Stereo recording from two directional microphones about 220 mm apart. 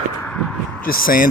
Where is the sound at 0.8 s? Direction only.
40° left (ahead or behind).